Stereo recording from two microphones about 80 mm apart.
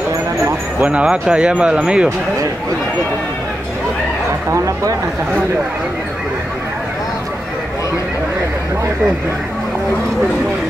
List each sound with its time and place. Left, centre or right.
0.8 s speech: centre
4.5 s speech: right